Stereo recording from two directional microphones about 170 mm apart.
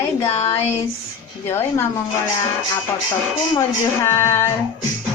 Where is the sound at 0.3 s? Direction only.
40° left (ahead or behind).